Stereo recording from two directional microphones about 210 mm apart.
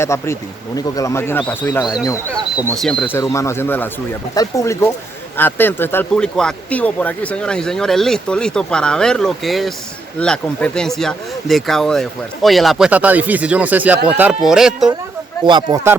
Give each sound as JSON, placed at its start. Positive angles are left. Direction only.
{"t": 0.0, "sound": "speech", "side_deg": 15}
{"t": 15.4, "sound": "speech", "side_deg": -20}